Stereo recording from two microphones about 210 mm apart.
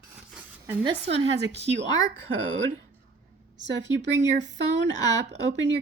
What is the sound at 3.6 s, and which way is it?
Speech, 60° right (ahead or behind).